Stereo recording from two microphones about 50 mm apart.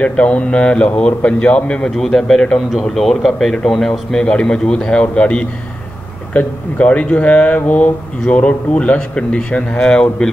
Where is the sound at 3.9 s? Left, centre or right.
Centre.